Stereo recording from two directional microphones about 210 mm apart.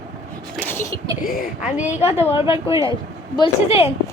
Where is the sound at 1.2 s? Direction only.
40° left (ahead or behind).